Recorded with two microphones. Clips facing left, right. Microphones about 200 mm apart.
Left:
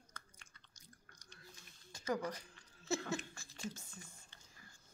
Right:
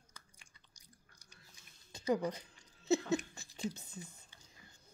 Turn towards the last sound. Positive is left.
turn(degrees=-20)  # may be behind; listen again after turning